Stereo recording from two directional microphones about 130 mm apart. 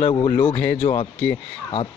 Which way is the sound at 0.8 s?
45° left (ahead or behind).